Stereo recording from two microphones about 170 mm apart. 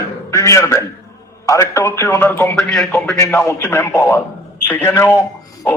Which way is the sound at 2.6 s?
Centre (ahead or behind).